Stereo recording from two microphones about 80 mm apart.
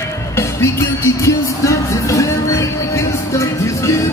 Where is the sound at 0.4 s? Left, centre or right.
Left.